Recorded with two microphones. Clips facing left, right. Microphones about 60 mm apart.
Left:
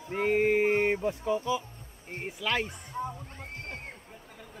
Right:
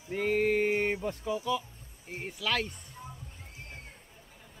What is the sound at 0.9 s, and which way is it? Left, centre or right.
Speech, centre.